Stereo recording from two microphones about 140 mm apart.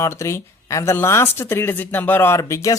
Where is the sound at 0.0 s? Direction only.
20° left (ahead or behind).